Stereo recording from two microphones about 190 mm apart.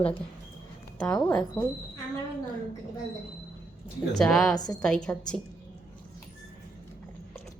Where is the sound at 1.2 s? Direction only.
5° left (ahead or behind).